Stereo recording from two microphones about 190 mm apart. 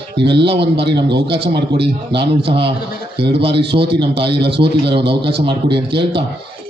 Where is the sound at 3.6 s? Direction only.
60° right (ahead or behind).